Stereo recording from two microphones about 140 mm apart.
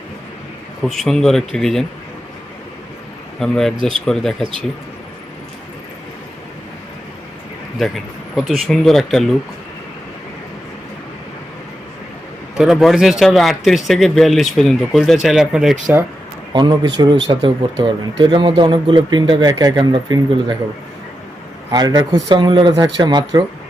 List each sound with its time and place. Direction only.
0.8 s speech: centre (ahead or behind)
3.4 s speech: 5° left (ahead or behind)
7.8 s speech: centre (ahead or behind)
12.5 s speech: centre (ahead or behind)
16.5 s speech: 30° right (ahead or behind)
21.7 s speech: 25° right (ahead or behind)